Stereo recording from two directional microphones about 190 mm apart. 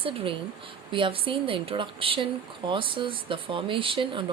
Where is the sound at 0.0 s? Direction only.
30° right (ahead or behind).